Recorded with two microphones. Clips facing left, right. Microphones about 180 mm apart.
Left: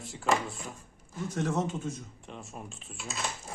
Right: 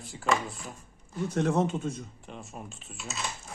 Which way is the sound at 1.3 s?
60° right (ahead or behind).